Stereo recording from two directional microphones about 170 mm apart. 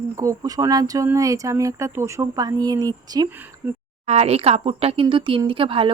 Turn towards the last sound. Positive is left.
turn(degrees=-30)  # may be behind; listen again after turning